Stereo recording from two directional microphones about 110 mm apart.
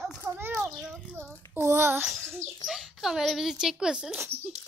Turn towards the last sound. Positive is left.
turn(degrees=-5)  # may be behind; listen again after turning